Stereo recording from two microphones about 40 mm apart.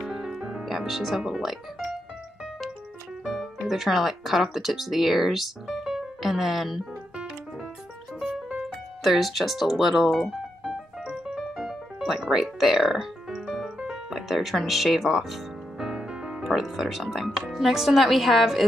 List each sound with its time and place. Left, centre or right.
0.0 s music: centre
3.3 s speech: centre
8.5 s music: right
9.0 s speech: centre
11.3 s music: centre
16.4 s speech: centre
17.5 s speech: centre